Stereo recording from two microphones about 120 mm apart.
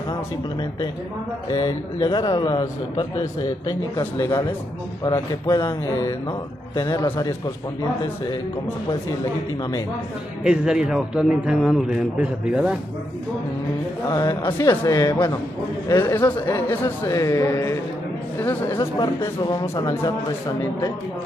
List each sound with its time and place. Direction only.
1.5 s a man's voice: 40° left (ahead or behind)
4.0 s a man's voice: 30° left (ahead or behind)
6.7 s a man's voice: 30° left (ahead or behind)
10.4 s a man's voice: 5° right (ahead or behind)
14.6 s a man's voice: 30° left (ahead or behind)
16.4 s a man's voice: 20° left (ahead or behind)